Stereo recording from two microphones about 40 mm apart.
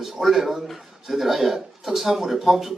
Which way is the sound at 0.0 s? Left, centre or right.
Centre.